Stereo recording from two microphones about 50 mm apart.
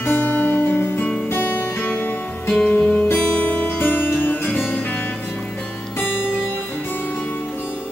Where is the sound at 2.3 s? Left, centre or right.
Left.